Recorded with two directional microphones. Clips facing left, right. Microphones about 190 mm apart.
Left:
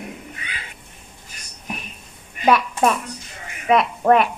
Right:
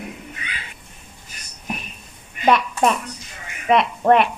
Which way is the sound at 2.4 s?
5° left (ahead or behind).